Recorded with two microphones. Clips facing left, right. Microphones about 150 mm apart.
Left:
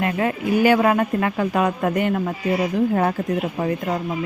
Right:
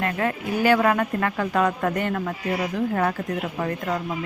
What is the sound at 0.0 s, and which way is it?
Speech, 10° left (ahead or behind).